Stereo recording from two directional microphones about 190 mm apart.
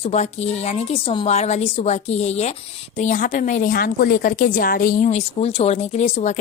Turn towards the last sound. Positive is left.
turn(degrees=35)  # may be behind; listen again after turning